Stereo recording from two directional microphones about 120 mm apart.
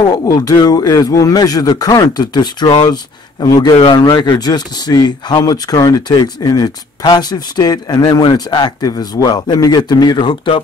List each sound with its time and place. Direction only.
0.0 s speech: 25° left (ahead or behind); by 10.6 s 45° left (ahead or behind)